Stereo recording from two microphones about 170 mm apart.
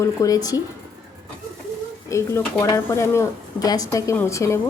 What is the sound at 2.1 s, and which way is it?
A woman's voice, 15° left (ahead or behind).